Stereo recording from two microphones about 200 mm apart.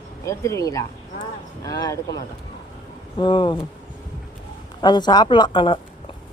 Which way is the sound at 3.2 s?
25° left (ahead or behind).